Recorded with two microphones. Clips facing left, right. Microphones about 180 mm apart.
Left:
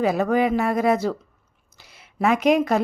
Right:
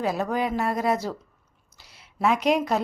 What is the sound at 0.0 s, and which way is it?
A woman's voice, 60° left (ahead or behind).